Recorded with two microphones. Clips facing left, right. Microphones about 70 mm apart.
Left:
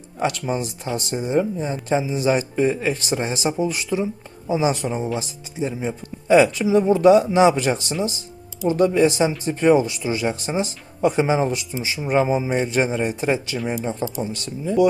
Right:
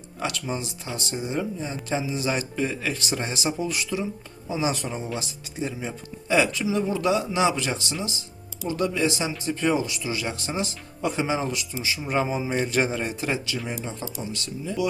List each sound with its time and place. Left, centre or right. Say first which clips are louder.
0.2 s speech: left 6 dB; left
4.9 s speech: left 6 dB; centre
6.2 s speech: left 7 dB; left
12.0 s speech: left 7 dB; centre
12.6 s speech: left 4 dB; centre
13.1 s speech: left 6 dB; left
13.7 s speech: left 8 dB; left